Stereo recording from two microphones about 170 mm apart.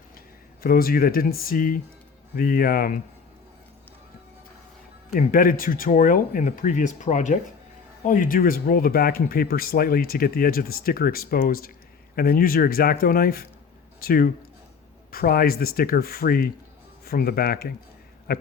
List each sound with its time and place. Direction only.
0.6 s speech: 60° left (ahead or behind)
5.1 s speech: 55° left (ahead or behind)